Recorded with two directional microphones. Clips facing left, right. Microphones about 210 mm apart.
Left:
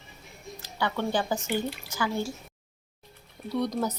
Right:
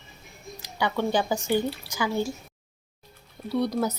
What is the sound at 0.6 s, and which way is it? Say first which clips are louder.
Speech: right 3 dB; 15° right (ahead or behind).